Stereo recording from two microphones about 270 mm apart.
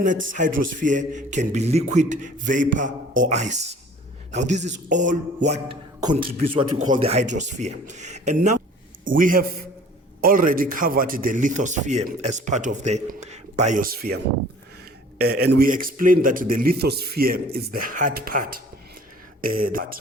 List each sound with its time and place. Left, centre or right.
0.3 s a man's voice: right
15.2 s a man's voice: right